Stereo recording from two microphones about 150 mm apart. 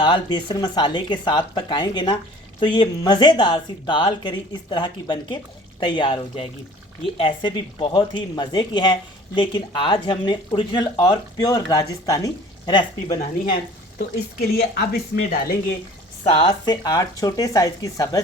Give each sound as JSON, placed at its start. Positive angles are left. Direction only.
{"t": 0.0, "sound": "speech", "side_deg": 30}
{"t": 14.5, "sound": "speech", "side_deg": 90}
{"t": 16.2, "sound": "speech", "side_deg": 40}